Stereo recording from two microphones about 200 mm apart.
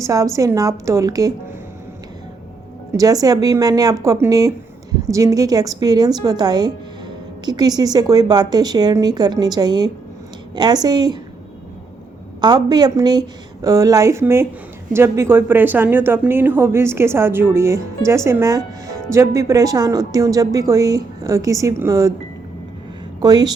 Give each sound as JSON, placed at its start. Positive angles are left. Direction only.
{"t": 0.0, "sound": "speech", "side_deg": -15}
{"t": 2.9, "sound": "a woman's voice", "side_deg": -15}
{"t": 12.4, "sound": "speech", "side_deg": -20}
{"t": 23.2, "sound": "a woman's voice", "side_deg": -20}